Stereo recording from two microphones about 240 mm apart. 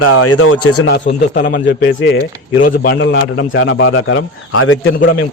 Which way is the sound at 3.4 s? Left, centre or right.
Left.